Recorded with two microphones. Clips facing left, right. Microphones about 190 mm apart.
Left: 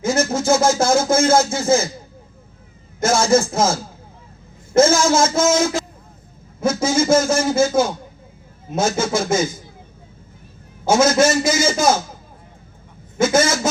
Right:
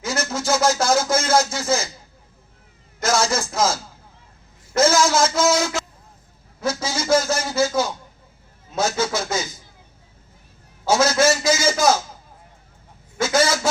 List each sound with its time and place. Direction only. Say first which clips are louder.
0.0 s a sound: left 6 dB; 50° left (ahead or behind)
3.0 s a man's voice: left 5 dB; 50° left (ahead or behind)
6.6 s a sound: left 6 dB; 50° left (ahead or behind)
7.0 s a man's voice: left 3 dB; 50° left (ahead or behind)
10.8 s a man's voice: left 3 dB; 50° left (ahead or behind)
13.2 s a man's voice: left 3 dB; 50° left (ahead or behind)